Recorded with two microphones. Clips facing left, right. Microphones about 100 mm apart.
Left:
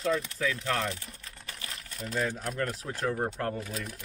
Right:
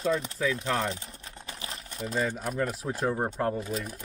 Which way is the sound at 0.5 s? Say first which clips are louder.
Right 2 dB; 20° right (ahead or behind).